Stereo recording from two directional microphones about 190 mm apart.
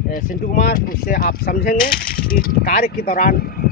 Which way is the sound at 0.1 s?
45° left (ahead or behind).